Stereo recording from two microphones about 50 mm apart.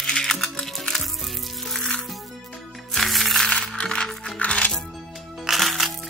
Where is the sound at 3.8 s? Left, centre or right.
Centre.